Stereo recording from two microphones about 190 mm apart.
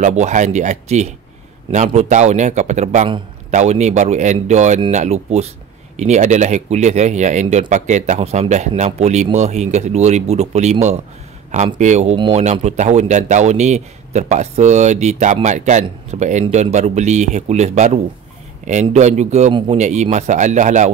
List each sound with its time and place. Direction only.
0.0 s speech: 40° right (ahead or behind)